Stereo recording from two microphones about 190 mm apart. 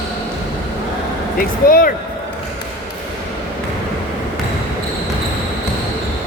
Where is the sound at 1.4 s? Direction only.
50° left (ahead or behind).